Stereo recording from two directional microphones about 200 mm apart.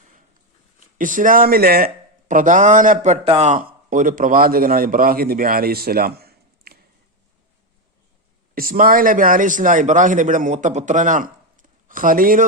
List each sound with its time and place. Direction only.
0.9 s a man's voice: 40° right (ahead or behind)
8.5 s a man's voice: 45° right (ahead or behind)